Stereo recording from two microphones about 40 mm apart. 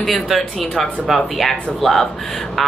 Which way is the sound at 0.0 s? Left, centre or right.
Centre.